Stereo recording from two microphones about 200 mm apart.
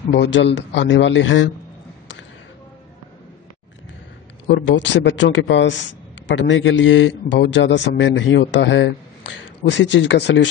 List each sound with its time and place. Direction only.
0.1 s a man's voice: 60° left (ahead or behind)
4.5 s a man's voice: 60° left (ahead or behind)